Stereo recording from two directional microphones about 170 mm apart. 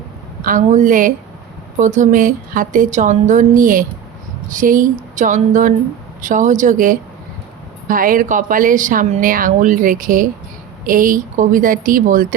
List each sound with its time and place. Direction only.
0.4 s speech: 50° right (ahead or behind)